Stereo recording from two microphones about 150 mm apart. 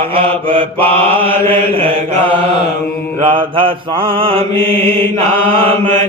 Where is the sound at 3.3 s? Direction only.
35° right (ahead or behind).